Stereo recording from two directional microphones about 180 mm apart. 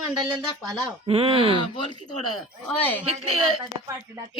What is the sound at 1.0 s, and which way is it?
Speech, 30° right (ahead or behind).